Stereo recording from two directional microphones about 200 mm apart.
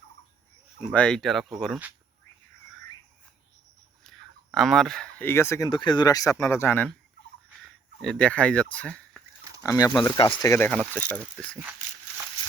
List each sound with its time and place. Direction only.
0.9 s speech: 5° left (ahead or behind)
4.0 s speech: centre (ahead or behind)
9.6 s speech: 15° left (ahead or behind)